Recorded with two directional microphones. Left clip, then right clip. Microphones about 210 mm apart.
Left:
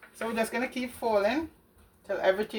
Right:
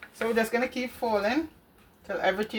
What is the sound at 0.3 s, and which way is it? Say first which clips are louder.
Speech: right 2 dB; 25° right (ahead or behind).